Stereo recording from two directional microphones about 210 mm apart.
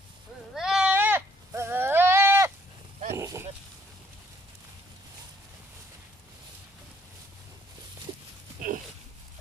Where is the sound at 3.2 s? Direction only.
15° right (ahead or behind).